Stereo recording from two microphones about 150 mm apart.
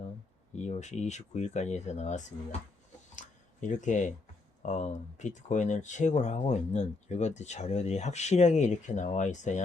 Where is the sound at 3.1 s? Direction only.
55° left (ahead or behind).